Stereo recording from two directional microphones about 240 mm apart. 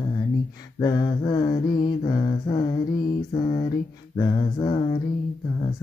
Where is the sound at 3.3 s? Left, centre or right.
Left.